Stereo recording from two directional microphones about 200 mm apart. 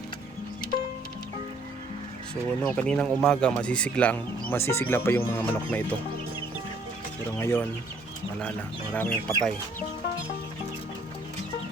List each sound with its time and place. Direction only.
2.3 s speech: 5° left (ahead or behind)
7.3 s speech: 10° left (ahead or behind)